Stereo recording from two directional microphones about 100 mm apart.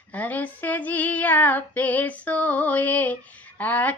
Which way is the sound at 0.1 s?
15° left (ahead or behind).